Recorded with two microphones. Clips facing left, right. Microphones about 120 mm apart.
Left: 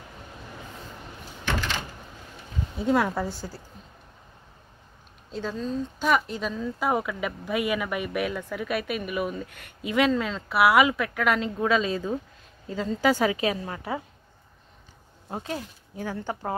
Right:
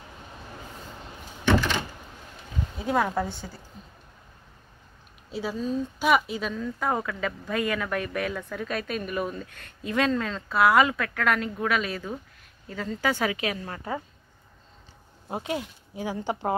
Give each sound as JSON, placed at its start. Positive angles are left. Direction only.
{"t": 2.8, "sound": "a woman's voice", "side_deg": 0}
{"t": 5.3, "sound": "a woman's voice", "side_deg": -10}
{"t": 13.7, "sound": "a woman's voice", "side_deg": 10}
{"t": 15.2, "sound": "speech", "side_deg": -15}